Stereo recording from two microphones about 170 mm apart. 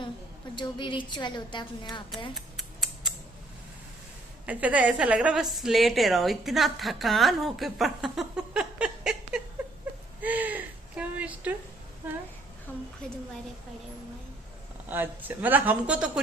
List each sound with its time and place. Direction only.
0.5 s a woman's voice: 25° left (ahead or behind)
2.3 s scissors: centre (ahead or behind)
4.4 s a woman's voice: 10° right (ahead or behind)
10.2 s a sound: 10° right (ahead or behind)
12.7 s a woman's voice: 10° left (ahead or behind)
14.8 s speech: 10° right (ahead or behind)